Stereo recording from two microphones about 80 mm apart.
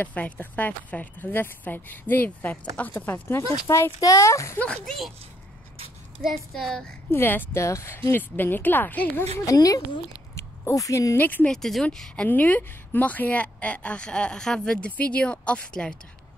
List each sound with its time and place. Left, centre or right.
0.0 s speech: left
3.6 s speech: left
4.6 s a woman's voice: centre
6.2 s speech: centre
7.1 s speech: left
8.1 s speech: left
9.5 s speech: left
11.1 s speech: left
11.4 s a woman's voice: centre
12.3 s a woman's voice: left